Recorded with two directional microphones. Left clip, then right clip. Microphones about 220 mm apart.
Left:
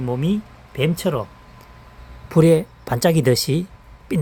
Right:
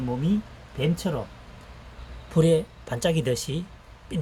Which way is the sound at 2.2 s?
45° left (ahead or behind).